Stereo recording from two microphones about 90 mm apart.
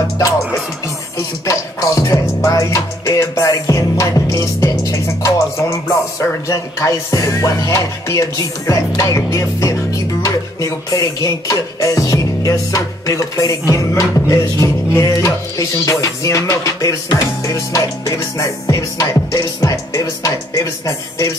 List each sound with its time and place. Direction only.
1.4 s music: 35° left (ahead or behind)